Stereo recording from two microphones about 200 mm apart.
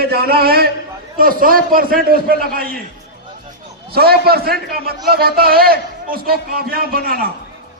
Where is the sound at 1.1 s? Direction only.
45° right (ahead or behind).